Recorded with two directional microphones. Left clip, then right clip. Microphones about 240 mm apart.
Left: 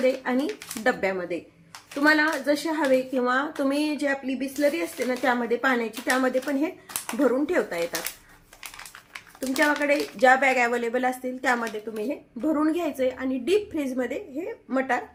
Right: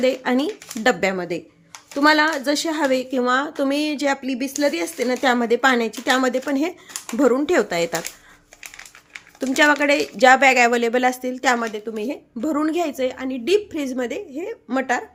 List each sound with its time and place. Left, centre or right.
0.0 s a woman's voice: right
9.8 s a woman's voice: right